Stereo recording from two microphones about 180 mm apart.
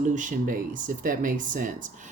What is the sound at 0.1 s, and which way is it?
Speech, 45° right (ahead or behind).